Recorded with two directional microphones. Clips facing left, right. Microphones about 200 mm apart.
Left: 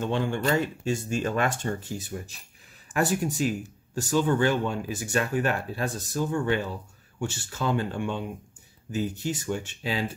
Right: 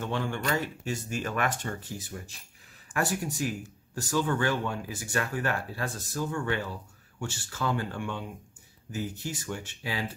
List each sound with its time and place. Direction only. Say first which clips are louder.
0.0 s speech: left 5 dB; 25° left (ahead or behind)